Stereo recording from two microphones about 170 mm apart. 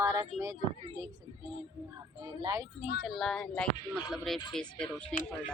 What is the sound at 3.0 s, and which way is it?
Speech, centre (ahead or behind).